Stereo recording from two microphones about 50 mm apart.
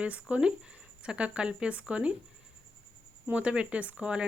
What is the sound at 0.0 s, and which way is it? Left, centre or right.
Speech, right.